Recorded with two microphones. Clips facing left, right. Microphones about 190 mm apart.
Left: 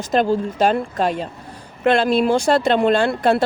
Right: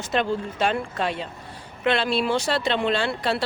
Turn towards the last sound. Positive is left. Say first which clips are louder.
# left 8 dB
turn(degrees=50)  # may be behind; listen again after turning